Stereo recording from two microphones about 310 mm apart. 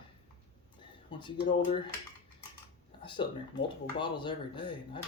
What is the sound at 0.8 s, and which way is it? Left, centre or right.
Speech, centre.